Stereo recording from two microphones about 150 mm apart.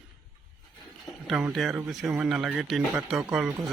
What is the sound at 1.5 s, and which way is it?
Speech, centre (ahead or behind).